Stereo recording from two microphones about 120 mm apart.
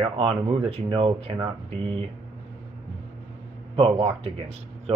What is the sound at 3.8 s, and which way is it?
Speech, 50° right (ahead or behind).